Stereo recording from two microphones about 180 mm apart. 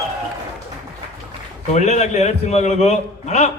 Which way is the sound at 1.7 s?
40° left (ahead or behind).